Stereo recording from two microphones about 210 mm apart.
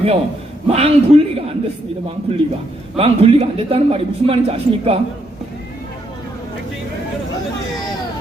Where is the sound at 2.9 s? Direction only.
25° right (ahead or behind).